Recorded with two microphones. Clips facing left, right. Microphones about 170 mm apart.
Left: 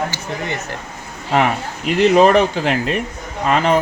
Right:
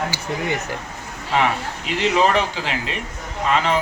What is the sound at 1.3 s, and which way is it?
Speech, 50° left (ahead or behind).